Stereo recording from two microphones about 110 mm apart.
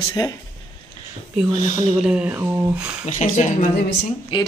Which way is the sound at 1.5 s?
90° left.